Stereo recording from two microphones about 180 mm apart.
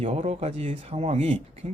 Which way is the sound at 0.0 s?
35° right (ahead or behind).